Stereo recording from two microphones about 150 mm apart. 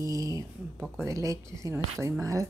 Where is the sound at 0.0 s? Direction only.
25° right (ahead or behind).